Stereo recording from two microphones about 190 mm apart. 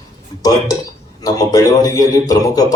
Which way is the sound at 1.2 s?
20° left (ahead or behind).